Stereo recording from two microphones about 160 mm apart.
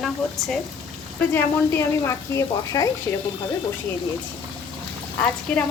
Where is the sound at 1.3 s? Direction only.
15° left (ahead or behind).